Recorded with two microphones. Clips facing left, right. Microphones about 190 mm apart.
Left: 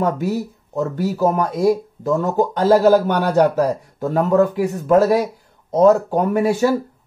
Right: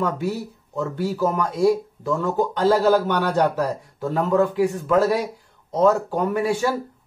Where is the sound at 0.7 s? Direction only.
45° left (ahead or behind).